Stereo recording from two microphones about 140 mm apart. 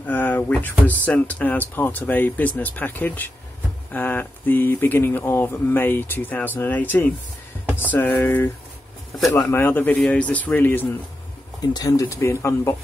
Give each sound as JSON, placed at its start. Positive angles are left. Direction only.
{"t": 0.0, "sound": "speech", "side_deg": 10}
{"t": 11.6, "sound": "speech", "side_deg": 30}